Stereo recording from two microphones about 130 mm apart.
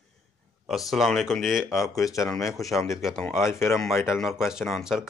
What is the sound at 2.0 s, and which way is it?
Speech, 25° left (ahead or behind).